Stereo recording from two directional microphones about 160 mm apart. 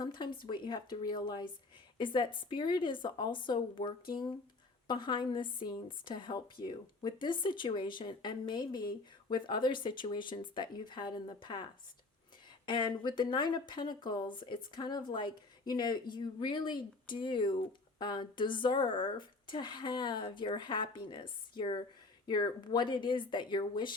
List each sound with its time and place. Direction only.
0.0 s speech: 30° left (ahead or behind)
12.6 s speech: 30° left (ahead or behind)